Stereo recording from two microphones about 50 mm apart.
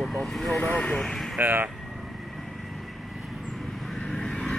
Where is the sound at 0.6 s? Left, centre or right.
Left.